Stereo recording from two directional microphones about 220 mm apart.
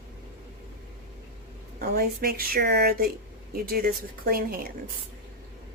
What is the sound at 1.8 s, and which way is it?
Speech, 40° right (ahead or behind).